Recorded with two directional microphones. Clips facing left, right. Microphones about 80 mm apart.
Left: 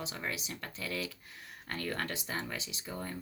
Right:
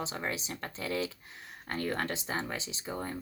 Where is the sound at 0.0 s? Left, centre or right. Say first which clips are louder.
Right 4 dB; right.